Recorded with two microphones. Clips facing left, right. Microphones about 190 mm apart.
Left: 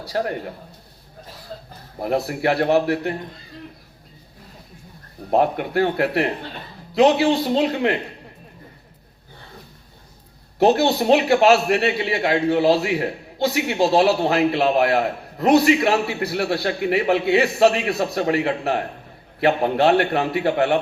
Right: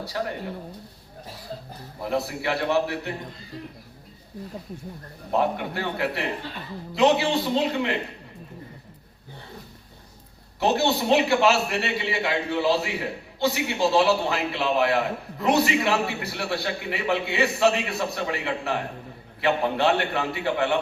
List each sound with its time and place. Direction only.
2.0 s a man's voice: 45° left (ahead or behind)
5.3 s a man's voice: 50° left (ahead or behind)
10.6 s a man's voice: 40° left (ahead or behind)